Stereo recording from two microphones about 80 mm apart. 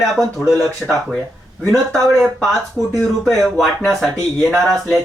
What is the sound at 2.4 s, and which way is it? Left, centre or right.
Speech, centre.